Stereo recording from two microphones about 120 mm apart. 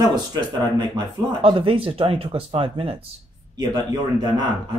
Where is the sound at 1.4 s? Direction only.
45° right (ahead or behind).